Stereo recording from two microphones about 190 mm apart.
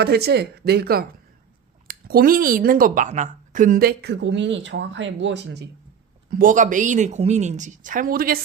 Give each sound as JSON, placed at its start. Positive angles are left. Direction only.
{"t": 0.0, "sound": "speech", "side_deg": -55}
{"t": 6.3, "sound": "speech", "side_deg": -45}